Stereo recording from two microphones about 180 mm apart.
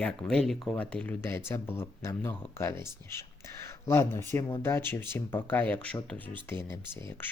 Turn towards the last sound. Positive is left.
turn(degrees=10)  # may be behind; listen again after turning